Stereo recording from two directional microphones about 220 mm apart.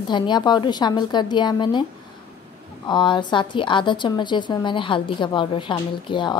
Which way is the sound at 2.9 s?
20° left (ahead or behind).